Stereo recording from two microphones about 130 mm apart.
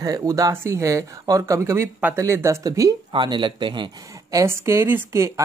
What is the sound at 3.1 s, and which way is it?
Speech, 40° right (ahead or behind).